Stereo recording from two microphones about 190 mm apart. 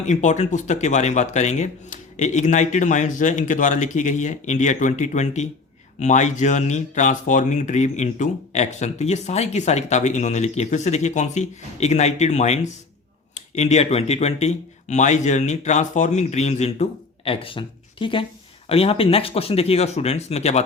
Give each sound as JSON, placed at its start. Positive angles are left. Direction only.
{"t": 0.0, "sound": "speech", "side_deg": 40}